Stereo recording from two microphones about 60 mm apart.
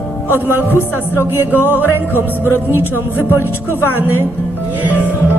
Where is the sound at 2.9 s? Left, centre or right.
Left.